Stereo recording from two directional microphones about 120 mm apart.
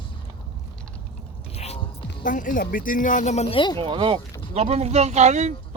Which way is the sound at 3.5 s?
45° left (ahead or behind).